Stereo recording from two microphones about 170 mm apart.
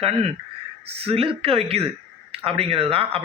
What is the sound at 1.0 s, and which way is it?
Speech, 35° right (ahead or behind).